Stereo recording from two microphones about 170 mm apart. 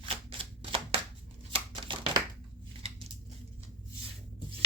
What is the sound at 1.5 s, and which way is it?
Shuffling cards, 30° right (ahead or behind).